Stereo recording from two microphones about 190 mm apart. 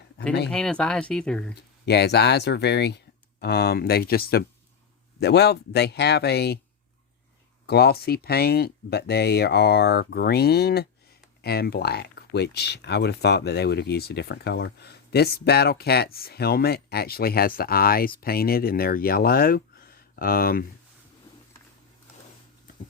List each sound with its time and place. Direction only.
0.5 s speech: 5° left (ahead or behind)
1.9 s speech: 60° left (ahead or behind)
7.7 s speech: 55° left (ahead or behind)